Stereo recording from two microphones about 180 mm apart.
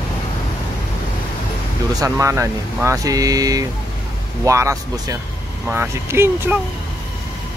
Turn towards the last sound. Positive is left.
turn(degrees=-15)  # may be behind; listen again after turning